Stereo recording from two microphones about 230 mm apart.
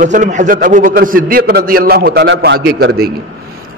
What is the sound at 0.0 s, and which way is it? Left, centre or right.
A man's voice, right.